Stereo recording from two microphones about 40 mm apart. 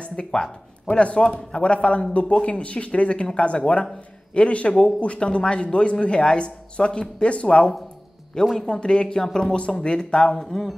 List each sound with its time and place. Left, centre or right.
0.0 s a man's voice: left
10.4 s speech: centre